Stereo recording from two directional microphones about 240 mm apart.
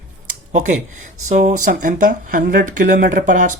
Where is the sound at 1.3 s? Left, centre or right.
Right.